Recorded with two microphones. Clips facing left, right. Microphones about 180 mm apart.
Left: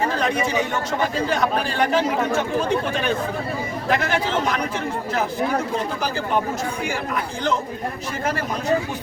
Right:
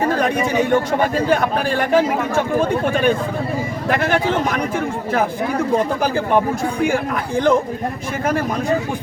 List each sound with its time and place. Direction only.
0.2 s speech: 55° right (ahead or behind)
6.0 s speech: 50° right (ahead or behind)